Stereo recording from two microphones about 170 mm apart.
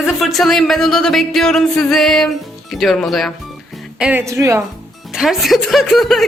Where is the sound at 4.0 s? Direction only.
10° right (ahead or behind).